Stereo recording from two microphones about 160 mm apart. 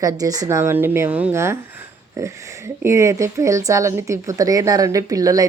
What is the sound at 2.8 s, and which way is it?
Speech, 20° right (ahead or behind).